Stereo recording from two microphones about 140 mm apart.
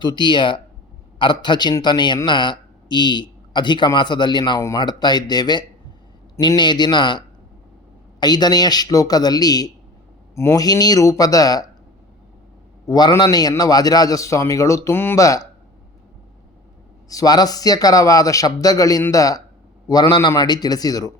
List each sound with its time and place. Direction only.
0.0 s a man's voice: 35° left (ahead or behind)
12.8 s a man's voice: 25° left (ahead or behind)
17.1 s a man's voice: 25° left (ahead or behind)